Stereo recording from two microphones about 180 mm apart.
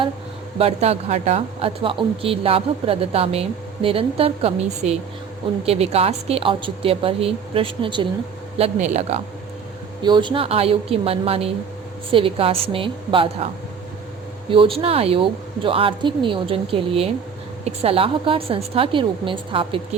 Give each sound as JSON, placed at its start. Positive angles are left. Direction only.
{"t": 0.6, "sound": "speech", "side_deg": -35}
{"t": 10.0, "sound": "speech", "side_deg": -25}
{"t": 14.5, "sound": "speech", "side_deg": -30}